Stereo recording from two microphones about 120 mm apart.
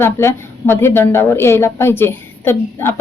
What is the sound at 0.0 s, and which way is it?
A woman's voice, 20° left (ahead or behind).